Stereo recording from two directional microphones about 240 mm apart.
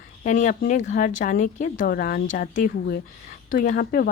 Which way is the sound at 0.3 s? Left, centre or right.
Left.